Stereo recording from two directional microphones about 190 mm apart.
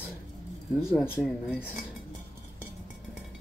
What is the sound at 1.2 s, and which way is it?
Speech, 5° right (ahead or behind).